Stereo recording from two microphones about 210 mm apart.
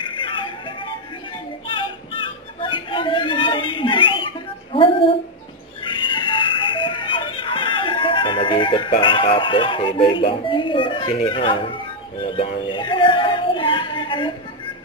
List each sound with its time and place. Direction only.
0.0 s music: 25° left (ahead or behind)
1.7 s a sound: 25° left (ahead or behind)
12.2 s speech: 25° left (ahead or behind)